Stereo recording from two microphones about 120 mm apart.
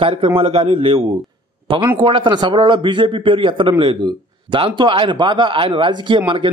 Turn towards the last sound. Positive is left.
turn(degrees=-45)  # may be behind; listen again after turning